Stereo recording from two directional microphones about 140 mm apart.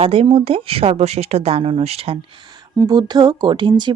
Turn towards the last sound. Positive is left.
turn(degrees=-30)  # may be behind; listen again after turning